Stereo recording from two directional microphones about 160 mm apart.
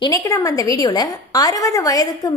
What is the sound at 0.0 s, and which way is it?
A woman's voice, 20° left (ahead or behind).